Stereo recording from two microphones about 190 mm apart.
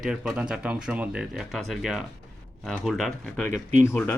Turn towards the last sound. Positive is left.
turn(degrees=10)  # may be behind; listen again after turning